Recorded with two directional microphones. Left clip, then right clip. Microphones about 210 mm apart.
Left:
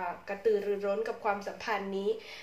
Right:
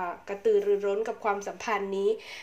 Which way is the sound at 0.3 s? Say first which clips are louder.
Right 5 dB; 35° right (ahead or behind).